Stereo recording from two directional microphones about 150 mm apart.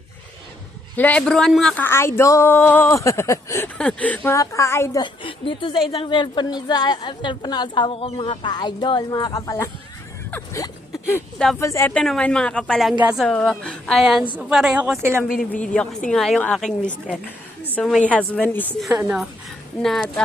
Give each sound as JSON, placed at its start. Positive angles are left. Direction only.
{"t": 0.9, "sound": "speech", "side_deg": 10}
{"t": 3.8, "sound": "speech", "side_deg": 5}
{"t": 5.0, "sound": "a woman's voice", "side_deg": 35}
{"t": 10.3, "sound": "a sound", "side_deg": 20}
{"t": 11.6, "sound": "a woman's voice", "side_deg": 20}
{"t": 11.9, "sound": "speech", "side_deg": 5}
{"t": 17.7, "sound": "a sound", "side_deg": 10}
{"t": 18.1, "sound": "speech", "side_deg": 10}
{"t": 18.8, "sound": "speech", "side_deg": -5}